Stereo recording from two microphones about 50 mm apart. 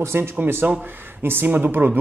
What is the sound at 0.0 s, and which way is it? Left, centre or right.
Speech, right.